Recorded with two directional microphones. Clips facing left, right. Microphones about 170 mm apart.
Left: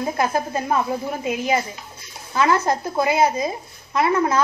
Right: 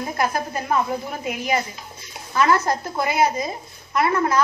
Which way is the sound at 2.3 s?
20° left (ahead or behind).